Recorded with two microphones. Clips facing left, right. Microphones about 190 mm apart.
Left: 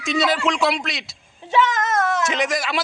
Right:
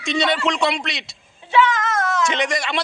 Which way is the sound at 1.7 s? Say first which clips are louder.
Left 1 dB; 50° left (ahead or behind).